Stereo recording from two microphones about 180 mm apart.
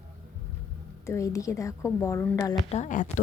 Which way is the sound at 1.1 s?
15° left (ahead or behind).